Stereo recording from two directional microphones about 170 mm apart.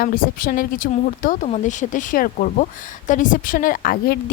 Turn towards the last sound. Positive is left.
turn(degrees=55)  # may be behind; listen again after turning